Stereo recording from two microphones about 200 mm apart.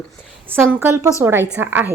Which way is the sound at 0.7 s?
10° right (ahead or behind).